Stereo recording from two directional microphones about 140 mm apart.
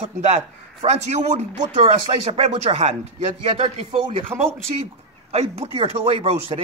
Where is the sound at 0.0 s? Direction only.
50° right (ahead or behind).